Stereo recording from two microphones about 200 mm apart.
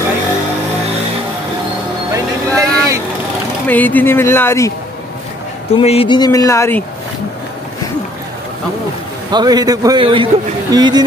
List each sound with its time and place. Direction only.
2.1 s vehicle: 15° right (ahead or behind)
3.6 s speech: 10° left (ahead or behind)
5.8 s speech: 30° left (ahead or behind)
9.3 s a man's voice: 20° right (ahead or behind)